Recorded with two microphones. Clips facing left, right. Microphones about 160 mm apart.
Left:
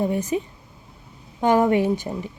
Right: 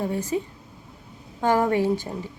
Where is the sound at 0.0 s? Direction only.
20° left (ahead or behind).